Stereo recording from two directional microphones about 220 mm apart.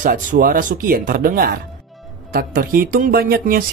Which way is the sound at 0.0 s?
40° right (ahead or behind).